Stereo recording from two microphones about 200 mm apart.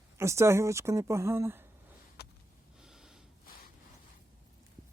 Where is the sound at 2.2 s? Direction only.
55° left (ahead or behind).